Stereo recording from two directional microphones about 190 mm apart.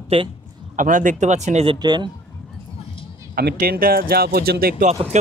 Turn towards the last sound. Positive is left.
turn(degrees=-35)  # may be behind; listen again after turning